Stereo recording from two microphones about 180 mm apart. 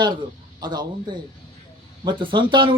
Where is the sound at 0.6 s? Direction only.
25° right (ahead or behind).